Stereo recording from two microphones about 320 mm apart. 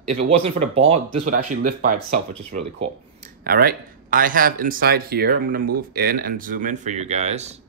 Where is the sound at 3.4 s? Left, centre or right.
Right.